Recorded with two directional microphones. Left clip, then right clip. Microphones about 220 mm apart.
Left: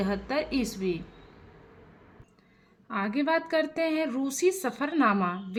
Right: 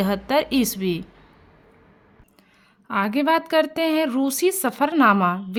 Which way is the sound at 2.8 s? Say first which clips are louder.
Right 8 dB; 50° right (ahead or behind).